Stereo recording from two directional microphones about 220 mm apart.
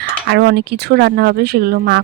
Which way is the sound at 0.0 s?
50° right (ahead or behind).